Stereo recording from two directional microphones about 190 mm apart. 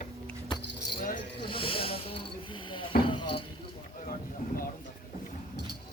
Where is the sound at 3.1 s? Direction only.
25° left (ahead or behind).